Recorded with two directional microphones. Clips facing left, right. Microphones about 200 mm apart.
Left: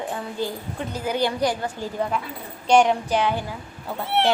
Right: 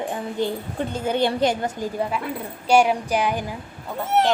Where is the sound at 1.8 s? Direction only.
10° right (ahead or behind).